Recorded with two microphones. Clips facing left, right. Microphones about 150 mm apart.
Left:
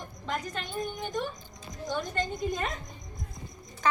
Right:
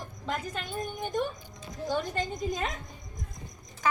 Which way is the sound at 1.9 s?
10° right (ahead or behind).